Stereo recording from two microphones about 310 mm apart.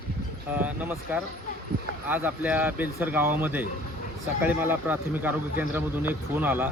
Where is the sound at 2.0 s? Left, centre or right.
Centre.